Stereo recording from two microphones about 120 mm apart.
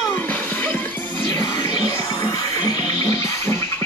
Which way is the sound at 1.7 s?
35° left (ahead or behind).